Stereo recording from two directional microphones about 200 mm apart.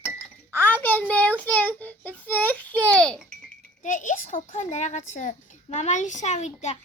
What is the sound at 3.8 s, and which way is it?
A child's voice, 40° left (ahead or behind).